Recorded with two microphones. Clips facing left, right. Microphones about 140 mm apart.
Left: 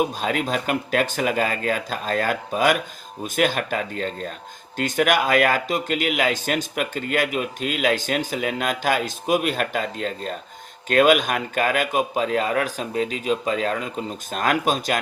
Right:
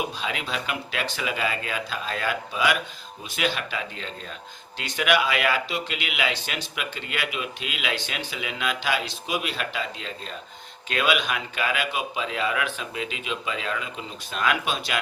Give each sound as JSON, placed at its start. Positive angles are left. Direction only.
{"t": 0.0, "sound": "speech", "side_deg": 45}